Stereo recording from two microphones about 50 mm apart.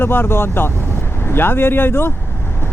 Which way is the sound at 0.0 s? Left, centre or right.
Left.